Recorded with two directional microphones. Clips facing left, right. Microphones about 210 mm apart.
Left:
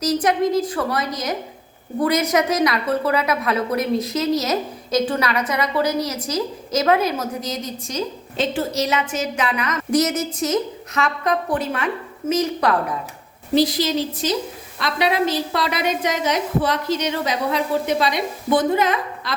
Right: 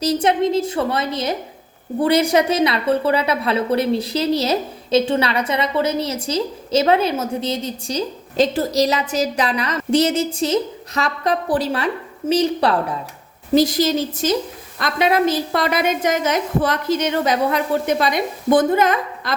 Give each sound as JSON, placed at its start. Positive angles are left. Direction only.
{"t": 0.0, "sound": "a woman's voice", "side_deg": -25}
{"t": 13.6, "sound": "a woman's voice", "side_deg": -45}